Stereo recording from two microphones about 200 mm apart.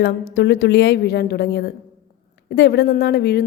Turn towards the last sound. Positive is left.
turn(degrees=55)  # may be behind; listen again after turning